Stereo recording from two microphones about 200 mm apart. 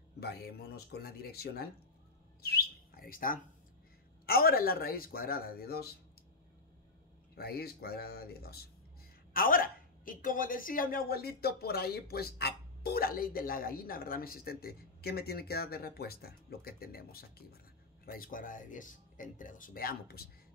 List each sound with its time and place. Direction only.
0.2 s speech: 50° left (ahead or behind)
7.3 s speech: 50° left (ahead or behind)